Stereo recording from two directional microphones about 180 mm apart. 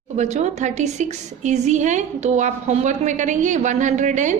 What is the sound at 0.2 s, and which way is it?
A woman's voice, 40° right (ahead or behind).